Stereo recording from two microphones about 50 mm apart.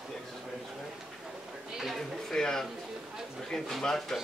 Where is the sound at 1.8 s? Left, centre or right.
Centre.